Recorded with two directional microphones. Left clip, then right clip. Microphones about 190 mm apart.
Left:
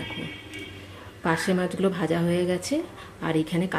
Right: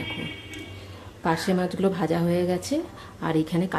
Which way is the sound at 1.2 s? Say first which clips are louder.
Even; centre (ahead or behind).